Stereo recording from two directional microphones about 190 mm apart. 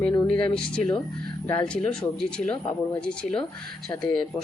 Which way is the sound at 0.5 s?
5° left (ahead or behind).